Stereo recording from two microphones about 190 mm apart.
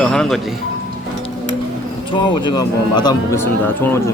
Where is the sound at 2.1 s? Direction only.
25° left (ahead or behind).